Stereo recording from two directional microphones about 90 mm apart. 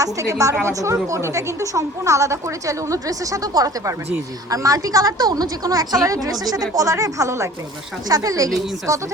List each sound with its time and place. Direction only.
0.0 s speech: 35° right (ahead or behind)